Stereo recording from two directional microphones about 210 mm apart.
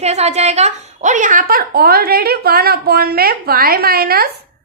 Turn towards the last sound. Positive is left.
turn(degrees=-45)  # may be behind; listen again after turning